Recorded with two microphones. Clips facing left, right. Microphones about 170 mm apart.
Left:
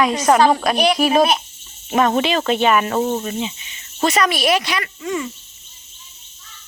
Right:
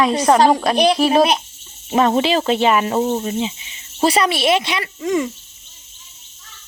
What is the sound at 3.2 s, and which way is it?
Speech, 25° right (ahead or behind).